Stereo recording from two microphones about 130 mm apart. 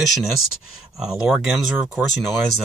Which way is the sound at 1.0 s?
5° right (ahead or behind).